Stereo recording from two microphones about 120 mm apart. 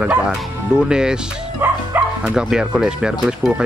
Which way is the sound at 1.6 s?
15° right (ahead or behind).